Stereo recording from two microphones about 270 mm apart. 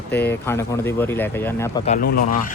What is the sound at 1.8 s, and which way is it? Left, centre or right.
Speech, left.